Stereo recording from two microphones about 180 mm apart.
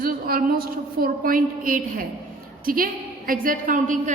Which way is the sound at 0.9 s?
50° right (ahead or behind).